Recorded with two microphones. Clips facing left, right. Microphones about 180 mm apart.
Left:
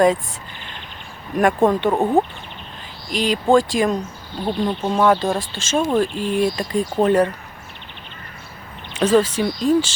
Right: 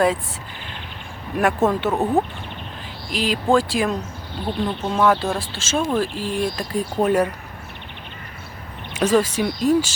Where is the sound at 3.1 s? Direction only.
Centre (ahead or behind).